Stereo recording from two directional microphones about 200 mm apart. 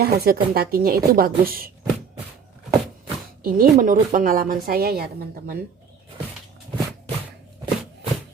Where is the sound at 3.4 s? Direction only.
45° right (ahead or behind).